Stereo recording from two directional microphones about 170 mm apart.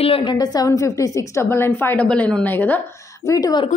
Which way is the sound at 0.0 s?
30° left (ahead or behind).